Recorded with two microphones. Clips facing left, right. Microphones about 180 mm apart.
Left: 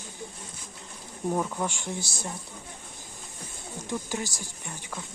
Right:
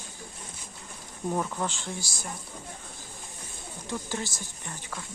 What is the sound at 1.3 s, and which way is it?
Speech, 5° left (ahead or behind).